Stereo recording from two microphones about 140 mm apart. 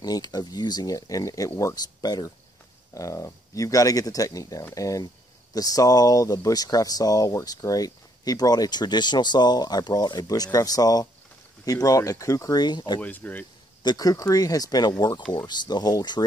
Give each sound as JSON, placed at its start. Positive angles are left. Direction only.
{"t": 0.0, "sound": "speech", "side_deg": 30}
{"t": 13.0, "sound": "speech", "side_deg": 10}
{"t": 13.8, "sound": "speech", "side_deg": 25}